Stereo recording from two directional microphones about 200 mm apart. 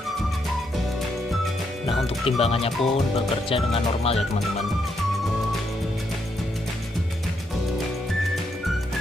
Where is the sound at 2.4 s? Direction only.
30° left (ahead or behind).